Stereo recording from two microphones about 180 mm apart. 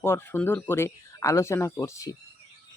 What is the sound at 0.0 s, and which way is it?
Speech, 10° left (ahead or behind).